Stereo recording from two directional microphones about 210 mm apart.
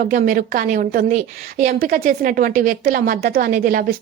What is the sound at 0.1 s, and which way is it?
A woman's voice, 40° right (ahead or behind).